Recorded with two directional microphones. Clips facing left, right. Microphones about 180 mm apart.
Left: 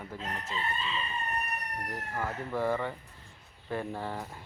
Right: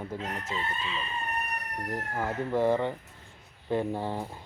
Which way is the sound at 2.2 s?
20° right (ahead or behind).